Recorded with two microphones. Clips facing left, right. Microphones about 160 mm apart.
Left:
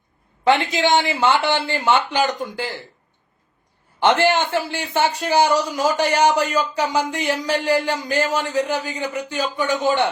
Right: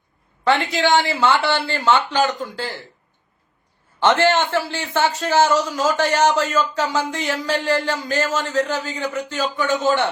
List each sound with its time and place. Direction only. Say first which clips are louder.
0.4 s a man's voice: left 1 dB; 20° left (ahead or behind)
4.0 s a man's voice: even; 15° left (ahead or behind)